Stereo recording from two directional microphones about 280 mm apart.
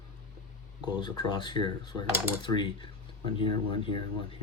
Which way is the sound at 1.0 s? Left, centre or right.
Centre.